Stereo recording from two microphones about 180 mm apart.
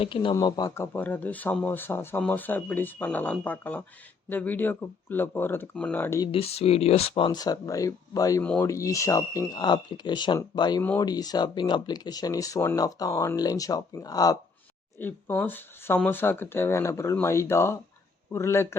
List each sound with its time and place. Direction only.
0.0 s speech: 30° left (ahead or behind); by 6.2 s 15° left (ahead or behind)
6.3 s speech: 35° left (ahead or behind); by 18.8 s 15° left (ahead or behind)